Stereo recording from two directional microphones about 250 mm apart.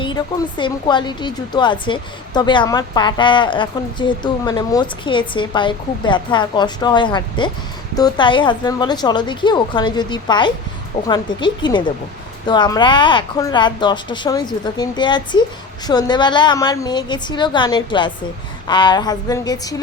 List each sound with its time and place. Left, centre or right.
0.0 s a woman's voice: centre